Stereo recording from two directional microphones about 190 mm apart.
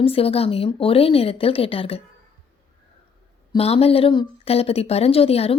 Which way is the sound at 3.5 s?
30° left (ahead or behind).